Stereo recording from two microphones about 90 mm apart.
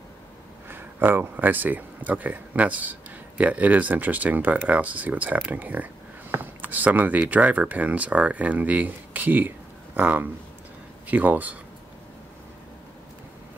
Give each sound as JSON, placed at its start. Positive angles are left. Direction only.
{"t": 0.7, "sound": "speech", "side_deg": -20}